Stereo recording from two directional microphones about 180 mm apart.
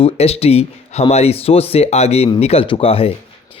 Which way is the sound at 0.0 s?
35° left (ahead or behind).